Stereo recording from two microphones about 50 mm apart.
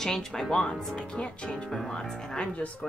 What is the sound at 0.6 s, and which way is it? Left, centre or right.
Speech, centre.